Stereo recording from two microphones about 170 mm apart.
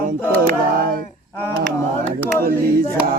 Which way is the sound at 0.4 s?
60° right (ahead or behind).